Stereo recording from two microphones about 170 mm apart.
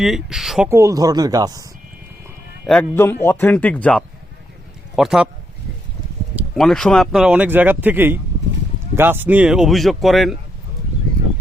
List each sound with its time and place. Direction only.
0.0 s speech: centre (ahead or behind)
0.7 s speech: 20° right (ahead or behind)
2.6 s a man's voice: 5° left (ahead or behind)
4.9 s speech: 5° right (ahead or behind)
6.6 s speech: centre (ahead or behind)